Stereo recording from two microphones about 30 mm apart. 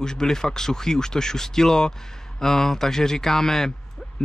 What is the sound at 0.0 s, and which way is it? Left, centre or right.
Speech, left.